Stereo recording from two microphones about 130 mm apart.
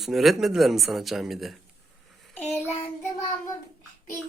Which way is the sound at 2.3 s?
15° left (ahead or behind).